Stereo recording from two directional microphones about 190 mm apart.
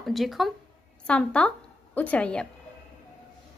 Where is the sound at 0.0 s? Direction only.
Centre (ahead or behind).